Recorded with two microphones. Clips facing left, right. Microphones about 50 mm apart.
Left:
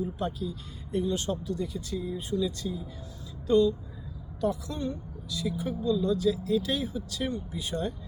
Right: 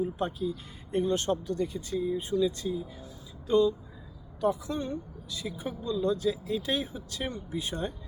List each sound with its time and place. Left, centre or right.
0.3 s speech: centre
0.9 s speech: right
2.0 s speech: right